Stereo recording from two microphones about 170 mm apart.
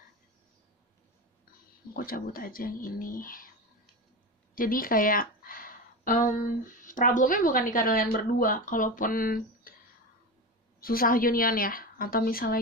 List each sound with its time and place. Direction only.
2.0 s speech: 60° left (ahead or behind)
4.6 s speech: 55° left (ahead or behind)
10.8 s speech: 60° left (ahead or behind)